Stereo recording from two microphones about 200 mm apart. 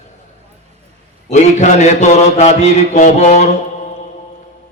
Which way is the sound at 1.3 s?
35° left (ahead or behind).